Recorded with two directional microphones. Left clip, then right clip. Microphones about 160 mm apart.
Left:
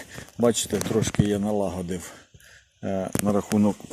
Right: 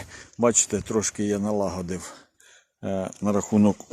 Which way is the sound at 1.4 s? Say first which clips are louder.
Even; 25° right (ahead or behind).